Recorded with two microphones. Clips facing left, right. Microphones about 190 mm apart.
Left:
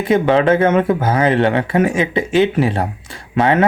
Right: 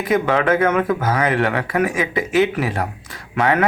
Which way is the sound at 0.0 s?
25° left (ahead or behind).